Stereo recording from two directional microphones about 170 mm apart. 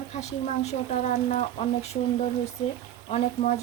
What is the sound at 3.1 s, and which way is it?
Speech, 40° left (ahead or behind).